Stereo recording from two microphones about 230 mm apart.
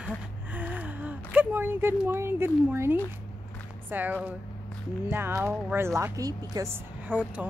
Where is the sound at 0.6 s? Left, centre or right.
Centre.